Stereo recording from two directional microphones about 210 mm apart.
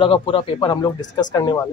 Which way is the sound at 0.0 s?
25° left (ahead or behind).